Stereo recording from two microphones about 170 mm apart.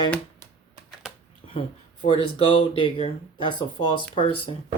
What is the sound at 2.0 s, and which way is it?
Speech, 30° left (ahead or behind).